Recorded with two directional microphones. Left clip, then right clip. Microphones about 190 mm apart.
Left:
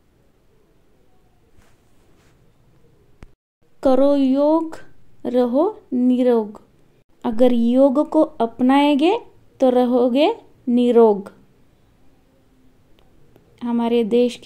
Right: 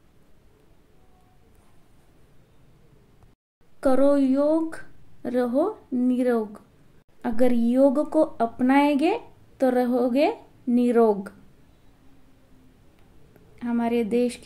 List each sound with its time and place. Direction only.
3.8 s speech: 15° left (ahead or behind)
13.6 s speech: 20° left (ahead or behind)